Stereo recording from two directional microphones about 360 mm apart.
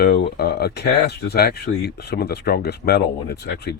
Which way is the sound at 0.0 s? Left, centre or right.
Left.